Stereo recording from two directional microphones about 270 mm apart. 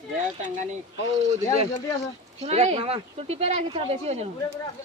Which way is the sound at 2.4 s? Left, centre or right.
Right.